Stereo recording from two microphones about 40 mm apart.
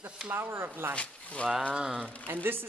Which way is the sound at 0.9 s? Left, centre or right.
Left.